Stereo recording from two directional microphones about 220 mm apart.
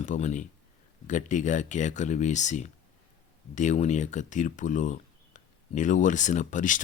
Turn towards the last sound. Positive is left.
turn(degrees=35)  # may be behind; listen again after turning